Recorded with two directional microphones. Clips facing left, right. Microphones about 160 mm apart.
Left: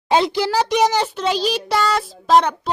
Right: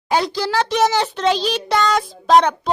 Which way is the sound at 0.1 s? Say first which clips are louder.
Left 2 dB; 20° left (ahead or behind).